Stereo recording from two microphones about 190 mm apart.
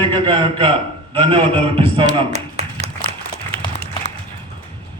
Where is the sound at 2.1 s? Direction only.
30° right (ahead or behind).